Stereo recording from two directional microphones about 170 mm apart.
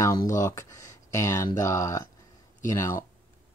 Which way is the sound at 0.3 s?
15° left (ahead or behind).